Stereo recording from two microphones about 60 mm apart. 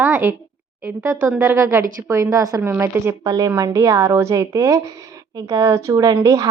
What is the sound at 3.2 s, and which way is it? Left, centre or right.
Speech, right.